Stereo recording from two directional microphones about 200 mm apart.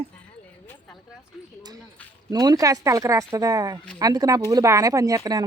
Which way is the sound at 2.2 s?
20° right (ahead or behind).